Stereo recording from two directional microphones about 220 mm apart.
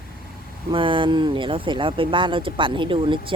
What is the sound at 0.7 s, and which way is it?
Speech, 25° right (ahead or behind).